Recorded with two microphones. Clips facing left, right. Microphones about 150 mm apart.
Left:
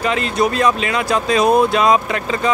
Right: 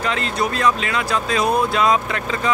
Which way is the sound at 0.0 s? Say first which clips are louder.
Left 4 dB; 15° left (ahead or behind).